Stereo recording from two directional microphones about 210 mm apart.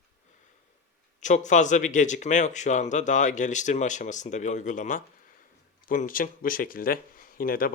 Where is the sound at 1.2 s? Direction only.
35° left (ahead or behind).